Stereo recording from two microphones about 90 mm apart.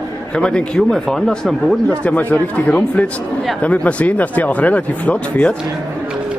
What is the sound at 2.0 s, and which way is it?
Speech, 20° left (ahead or behind).